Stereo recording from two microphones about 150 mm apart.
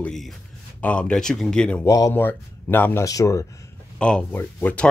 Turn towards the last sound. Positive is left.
turn(degrees=10)  # may be behind; listen again after turning